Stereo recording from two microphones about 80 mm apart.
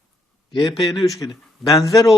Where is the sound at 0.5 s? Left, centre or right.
Left.